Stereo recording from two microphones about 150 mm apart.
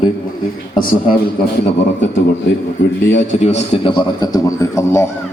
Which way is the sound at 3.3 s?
50° left (ahead or behind).